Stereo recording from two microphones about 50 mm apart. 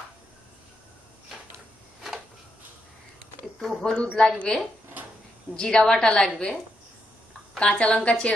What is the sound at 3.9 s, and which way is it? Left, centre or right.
Speech, left.